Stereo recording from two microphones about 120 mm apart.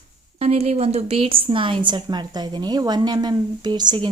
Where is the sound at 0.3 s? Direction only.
60° right (ahead or behind).